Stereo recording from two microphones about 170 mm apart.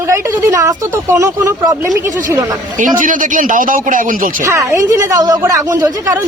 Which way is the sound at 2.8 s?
50° right (ahead or behind).